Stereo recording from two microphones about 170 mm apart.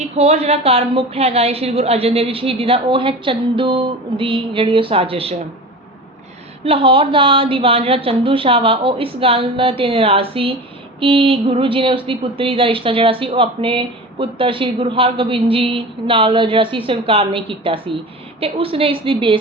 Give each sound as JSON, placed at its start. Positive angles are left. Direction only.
{"t": 0.0, "sound": "a woman's voice", "side_deg": -40}
{"t": 6.7, "sound": "a woman's voice", "side_deg": -30}